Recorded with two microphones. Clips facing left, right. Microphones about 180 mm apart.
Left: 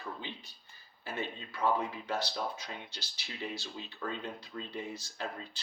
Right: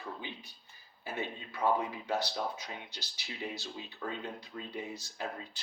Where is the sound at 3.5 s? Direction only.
15° right (ahead or behind).